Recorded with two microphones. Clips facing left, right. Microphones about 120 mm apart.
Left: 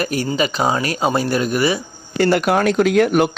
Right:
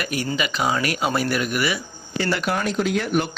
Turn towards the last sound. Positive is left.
turn(degrees=65)  # may be behind; listen again after turning